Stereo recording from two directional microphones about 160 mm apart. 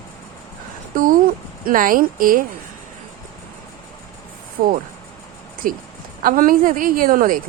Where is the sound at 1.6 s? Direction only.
60° right (ahead or behind).